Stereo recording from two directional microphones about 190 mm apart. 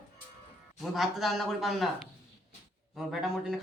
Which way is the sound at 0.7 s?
Centre (ahead or behind).